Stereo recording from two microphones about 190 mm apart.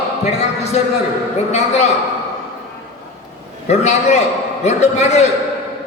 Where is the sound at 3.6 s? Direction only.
35° left (ahead or behind).